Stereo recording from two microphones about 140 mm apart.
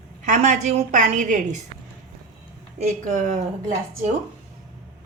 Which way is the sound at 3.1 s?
60° right (ahead or behind).